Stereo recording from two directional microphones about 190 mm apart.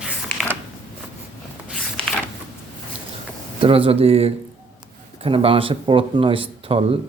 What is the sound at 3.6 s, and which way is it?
Speech, 30° right (ahead or behind).